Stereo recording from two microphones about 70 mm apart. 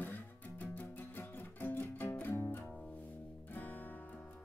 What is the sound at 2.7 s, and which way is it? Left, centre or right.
Music, centre.